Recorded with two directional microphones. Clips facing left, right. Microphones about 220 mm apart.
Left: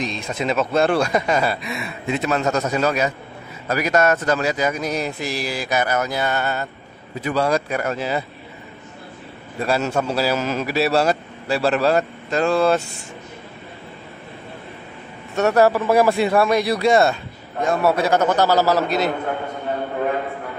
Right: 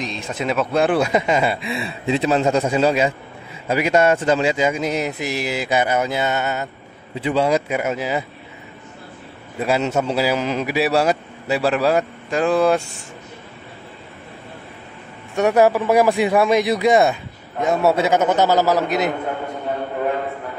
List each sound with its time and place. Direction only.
0.0 s speech: 5° right (ahead or behind)
1.1 s a man's voice: 25° right (ahead or behind)
9.7 s a man's voice: 20° right (ahead or behind)
15.3 s a man's voice: 15° right (ahead or behind)